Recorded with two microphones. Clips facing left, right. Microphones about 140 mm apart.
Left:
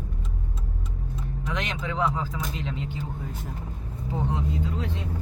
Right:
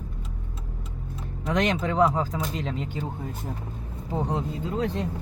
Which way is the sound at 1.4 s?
40° right (ahead or behind).